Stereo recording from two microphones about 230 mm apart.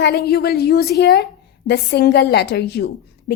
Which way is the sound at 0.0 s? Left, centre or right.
Left.